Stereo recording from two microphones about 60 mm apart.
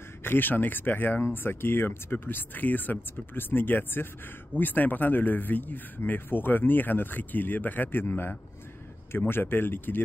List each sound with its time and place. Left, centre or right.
0.2 s speech: left